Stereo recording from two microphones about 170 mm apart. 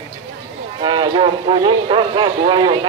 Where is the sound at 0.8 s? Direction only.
25° right (ahead or behind).